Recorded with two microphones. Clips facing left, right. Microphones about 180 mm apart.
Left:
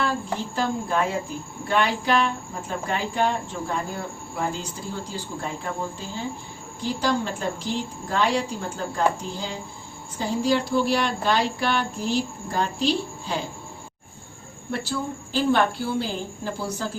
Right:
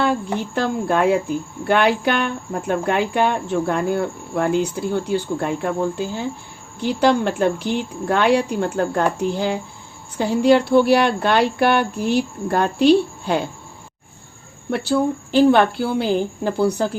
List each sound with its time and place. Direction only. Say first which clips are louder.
0.5 s speech: right 5 dB; 65° right (ahead or behind)
6.8 s speech: right 7 dB; 65° right (ahead or behind)
14.7 s speech: right 9 dB; 65° right (ahead or behind)